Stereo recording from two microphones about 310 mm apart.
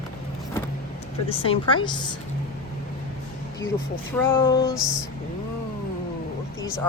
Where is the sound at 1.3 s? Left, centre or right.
Centre.